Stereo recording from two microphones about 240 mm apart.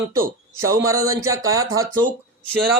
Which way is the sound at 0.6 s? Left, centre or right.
Centre.